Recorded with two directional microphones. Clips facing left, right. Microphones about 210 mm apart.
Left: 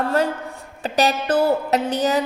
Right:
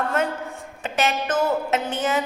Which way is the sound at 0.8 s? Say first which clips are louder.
Left 4 dB; 35° left (ahead or behind).